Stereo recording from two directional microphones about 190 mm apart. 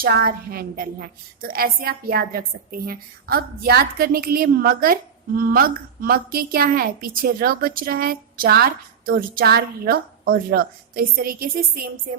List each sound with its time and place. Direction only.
0.0 s a woman's voice: 50° right (ahead or behind)